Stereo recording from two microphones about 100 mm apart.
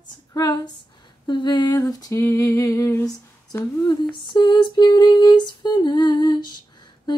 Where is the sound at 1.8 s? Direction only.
40° left (ahead or behind).